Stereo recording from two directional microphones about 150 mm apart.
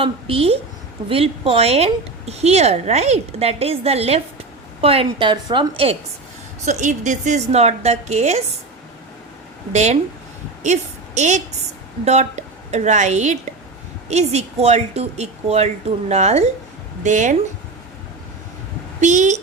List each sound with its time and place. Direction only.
0.0 s a woman's voice: 40° right (ahead or behind)
5.7 s a woman's voice: 40° right (ahead or behind)
6.7 s a woman's voice: 55° right (ahead or behind)
9.7 s a woman's voice: 50° right (ahead or behind)
18.9 s a woman's voice: 50° right (ahead or behind)